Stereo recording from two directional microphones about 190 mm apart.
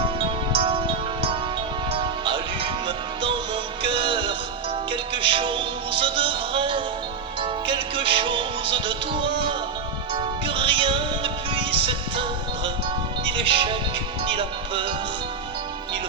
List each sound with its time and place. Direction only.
0.2 s music: 30° right (ahead or behind)
1.9 s music: 25° right (ahead or behind)